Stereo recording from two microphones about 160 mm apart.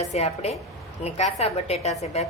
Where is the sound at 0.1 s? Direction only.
40° left (ahead or behind).